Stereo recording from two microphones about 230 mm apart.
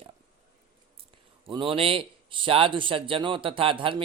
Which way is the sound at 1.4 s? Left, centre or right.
Right.